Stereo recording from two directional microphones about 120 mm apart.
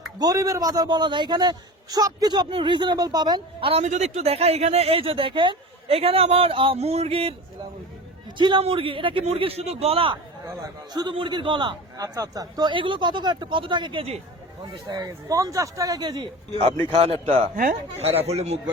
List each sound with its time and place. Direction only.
0.2 s a man's voice: 30° right (ahead or behind)
3.7 s speech: 70° right (ahead or behind); by 7.3 s 55° right (ahead or behind)
8.4 s a man's voice: 40° right (ahead or behind)
16.9 s a man's voice: 55° right (ahead or behind)